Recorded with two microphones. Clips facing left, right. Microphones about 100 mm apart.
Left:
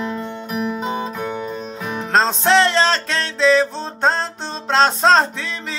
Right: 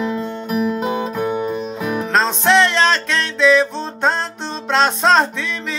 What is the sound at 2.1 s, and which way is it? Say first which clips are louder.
Music: left 1 dB; 35° left (ahead or behind).